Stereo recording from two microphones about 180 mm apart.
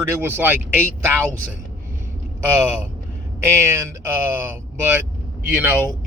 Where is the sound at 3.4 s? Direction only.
15° right (ahead or behind).